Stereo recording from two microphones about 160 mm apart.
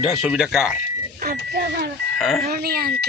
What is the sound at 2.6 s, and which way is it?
Speech, 70° right (ahead or behind).